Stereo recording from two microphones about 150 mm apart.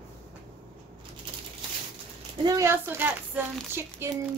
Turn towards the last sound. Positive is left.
turn(degrees=-15)  # may be behind; listen again after turning